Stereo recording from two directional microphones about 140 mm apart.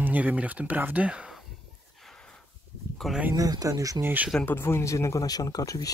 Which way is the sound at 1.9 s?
5° left (ahead or behind).